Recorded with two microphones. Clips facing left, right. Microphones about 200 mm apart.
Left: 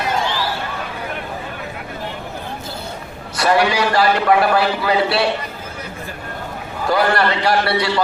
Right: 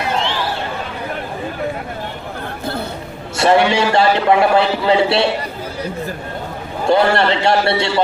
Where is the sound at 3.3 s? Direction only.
25° right (ahead or behind).